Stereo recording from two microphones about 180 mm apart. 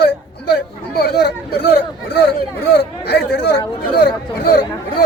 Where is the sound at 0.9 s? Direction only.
60° left (ahead or behind).